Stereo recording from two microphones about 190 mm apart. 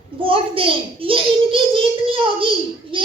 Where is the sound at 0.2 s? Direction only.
30° right (ahead or behind).